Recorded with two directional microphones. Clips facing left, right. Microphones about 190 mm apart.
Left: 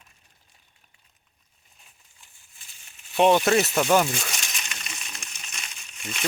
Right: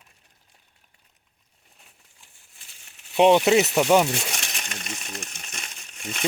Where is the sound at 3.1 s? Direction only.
15° right (ahead or behind).